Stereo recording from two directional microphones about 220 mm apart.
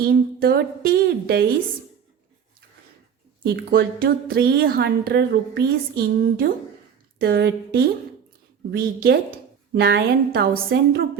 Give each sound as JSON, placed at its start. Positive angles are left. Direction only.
{"t": 0.0, "sound": "speech", "side_deg": -45}
{"t": 3.4, "sound": "speech", "side_deg": -45}